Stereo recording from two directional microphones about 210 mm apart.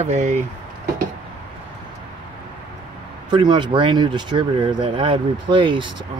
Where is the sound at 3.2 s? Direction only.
20° right (ahead or behind).